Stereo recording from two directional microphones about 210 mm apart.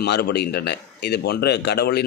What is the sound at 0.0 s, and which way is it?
A man's voice, 50° left (ahead or behind).